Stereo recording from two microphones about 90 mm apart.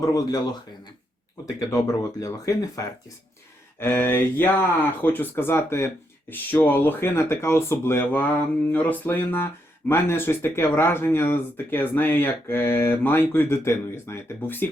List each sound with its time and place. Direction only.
0.0 s speech: 40° left (ahead or behind)
1.7 s speech: 40° left (ahead or behind)
3.8 s speech: 25° left (ahead or behind)